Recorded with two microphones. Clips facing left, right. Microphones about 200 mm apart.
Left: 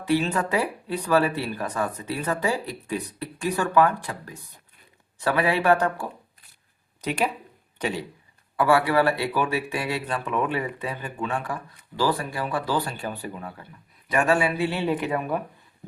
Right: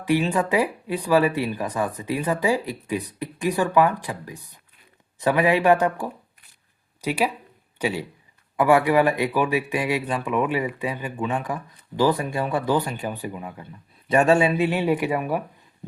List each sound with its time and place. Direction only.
0.0 s speech: 15° right (ahead or behind)
14.1 s speech: 25° right (ahead or behind); by 15.4 s 10° right (ahead or behind)